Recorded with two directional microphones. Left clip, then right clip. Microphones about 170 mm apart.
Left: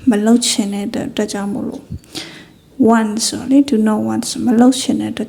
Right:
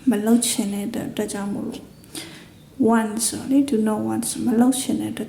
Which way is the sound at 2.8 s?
25° left (ahead or behind).